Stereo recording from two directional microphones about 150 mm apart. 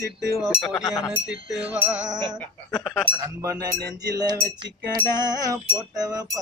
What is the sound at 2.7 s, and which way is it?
Speech, 5° left (ahead or behind).